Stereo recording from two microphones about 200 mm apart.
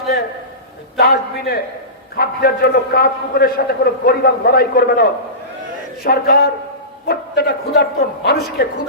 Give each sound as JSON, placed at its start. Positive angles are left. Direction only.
{"t": 0.9, "sound": "a man's voice", "side_deg": 50}
{"t": 6.1, "sound": "a man's voice", "side_deg": 50}